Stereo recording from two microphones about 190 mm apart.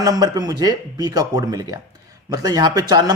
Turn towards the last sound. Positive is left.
turn(degrees=-20)  # may be behind; listen again after turning